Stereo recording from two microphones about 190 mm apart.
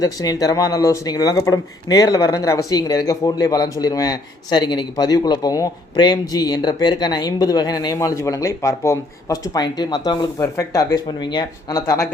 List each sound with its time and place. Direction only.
0.0 s speech: 20° left (ahead or behind)